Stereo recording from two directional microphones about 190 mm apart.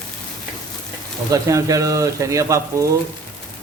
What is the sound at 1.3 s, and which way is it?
Speech, 15° right (ahead or behind).